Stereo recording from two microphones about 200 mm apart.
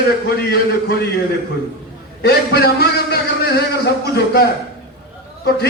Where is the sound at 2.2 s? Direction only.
50° left (ahead or behind).